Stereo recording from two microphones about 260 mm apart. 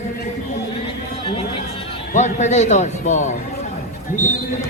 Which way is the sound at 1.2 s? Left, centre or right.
Left.